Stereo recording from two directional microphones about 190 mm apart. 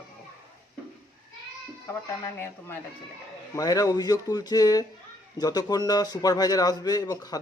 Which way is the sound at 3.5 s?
20° left (ahead or behind).